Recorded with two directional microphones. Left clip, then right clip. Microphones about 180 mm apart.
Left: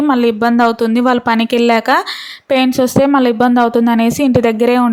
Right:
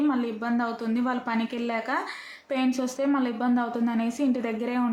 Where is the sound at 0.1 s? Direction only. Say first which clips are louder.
Left 16 dB; 55° left (ahead or behind).